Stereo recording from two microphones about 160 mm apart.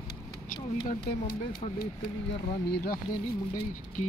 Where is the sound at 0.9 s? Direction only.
65° left (ahead or behind).